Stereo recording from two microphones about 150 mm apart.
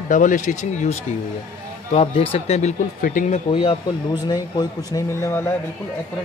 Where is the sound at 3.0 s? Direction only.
65° left (ahead or behind).